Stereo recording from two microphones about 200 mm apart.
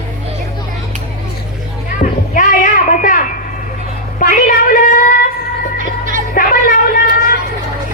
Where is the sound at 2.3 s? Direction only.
40° left (ahead or behind).